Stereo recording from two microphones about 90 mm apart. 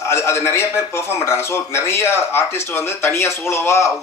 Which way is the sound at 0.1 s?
30° left (ahead or behind).